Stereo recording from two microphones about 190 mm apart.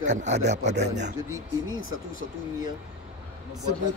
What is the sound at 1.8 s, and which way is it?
Speech, 90° right.